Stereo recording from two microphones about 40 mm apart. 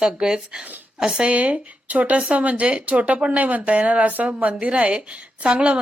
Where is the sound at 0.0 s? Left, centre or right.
Centre.